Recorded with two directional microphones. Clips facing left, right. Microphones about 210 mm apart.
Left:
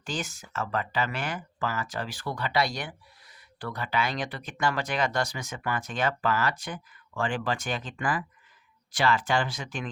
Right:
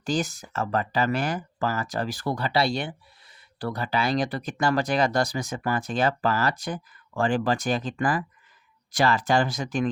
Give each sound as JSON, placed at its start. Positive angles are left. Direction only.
{"t": 0.0, "sound": "speech", "side_deg": -35}